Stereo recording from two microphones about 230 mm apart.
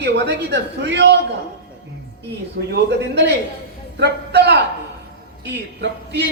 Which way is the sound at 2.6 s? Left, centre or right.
Right.